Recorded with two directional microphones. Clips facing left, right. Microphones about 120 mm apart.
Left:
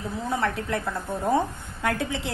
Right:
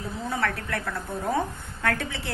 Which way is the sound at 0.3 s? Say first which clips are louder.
Left 3 dB; 20° left (ahead or behind).